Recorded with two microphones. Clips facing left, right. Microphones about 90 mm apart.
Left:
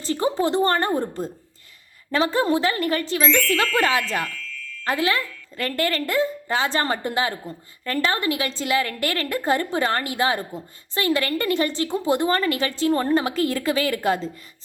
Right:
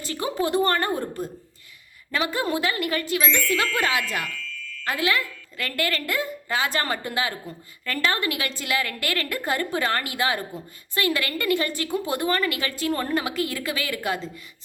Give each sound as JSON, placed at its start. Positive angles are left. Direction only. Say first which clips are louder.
{"t": 0.0, "sound": "a woman's voice", "louder": "left 4 dB", "side_deg": 30}